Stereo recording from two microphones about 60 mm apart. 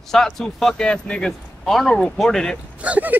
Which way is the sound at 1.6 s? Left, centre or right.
Centre.